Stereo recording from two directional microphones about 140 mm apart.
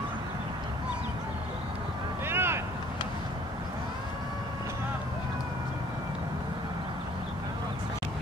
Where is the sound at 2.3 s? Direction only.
15° right (ahead or behind).